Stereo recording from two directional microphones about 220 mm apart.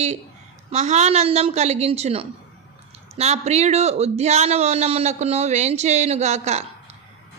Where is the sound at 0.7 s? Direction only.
30° right (ahead or behind).